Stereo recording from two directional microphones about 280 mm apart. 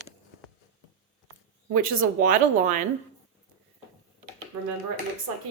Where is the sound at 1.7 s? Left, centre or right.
Right.